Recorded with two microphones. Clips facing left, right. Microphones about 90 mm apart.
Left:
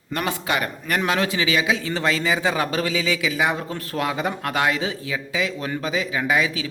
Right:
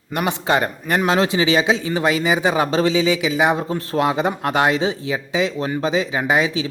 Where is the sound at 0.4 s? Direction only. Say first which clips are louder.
Right 5 dB; 30° right (ahead or behind).